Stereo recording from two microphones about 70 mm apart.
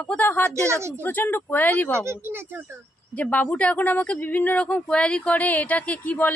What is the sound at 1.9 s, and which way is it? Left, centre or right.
Speech, right.